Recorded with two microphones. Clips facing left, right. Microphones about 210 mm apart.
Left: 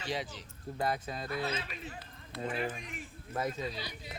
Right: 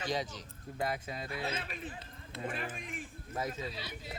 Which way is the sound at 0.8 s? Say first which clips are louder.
Left 2 dB; 40° left (ahead or behind).